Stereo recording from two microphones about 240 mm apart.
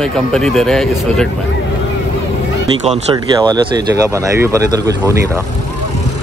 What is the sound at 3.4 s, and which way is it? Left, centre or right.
Speech, centre.